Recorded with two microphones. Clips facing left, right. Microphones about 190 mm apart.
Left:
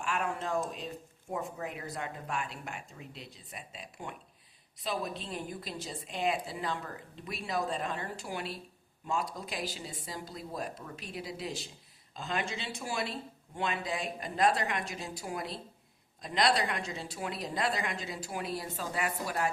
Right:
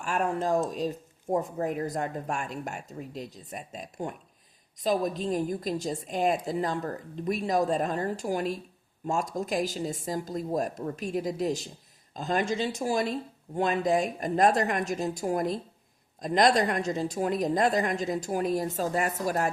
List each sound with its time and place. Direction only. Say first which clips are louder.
0.0 s a woman's voice: right 6 dB; 40° right (ahead or behind)